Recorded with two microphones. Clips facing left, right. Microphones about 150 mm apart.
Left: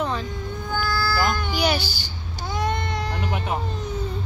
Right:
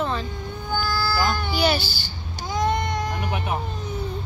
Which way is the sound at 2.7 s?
15° right (ahead or behind).